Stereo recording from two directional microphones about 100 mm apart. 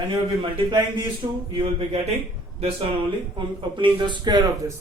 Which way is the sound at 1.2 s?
60° right (ahead or behind).